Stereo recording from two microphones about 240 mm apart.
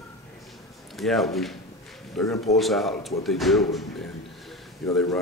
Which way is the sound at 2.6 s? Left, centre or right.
Centre.